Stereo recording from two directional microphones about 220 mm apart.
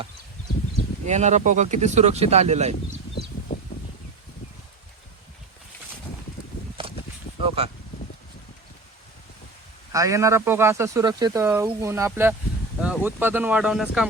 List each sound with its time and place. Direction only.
1.0 s speech: 30° right (ahead or behind)
6.8 s a sound: 25° right (ahead or behind)
7.4 s speech: 25° right (ahead or behind)
9.9 s speech: 15° right (ahead or behind)